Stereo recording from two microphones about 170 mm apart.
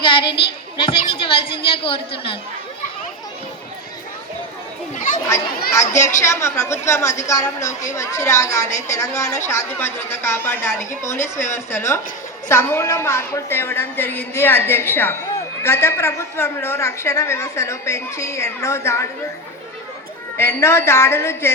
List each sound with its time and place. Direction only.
0.0 s a sound: 30° left (ahead or behind)
0.8 s a woman's voice: 30° left (ahead or behind)
5.3 s a woman's voice: 15° left (ahead or behind)
20.6 s a woman's voice: 15° left (ahead or behind)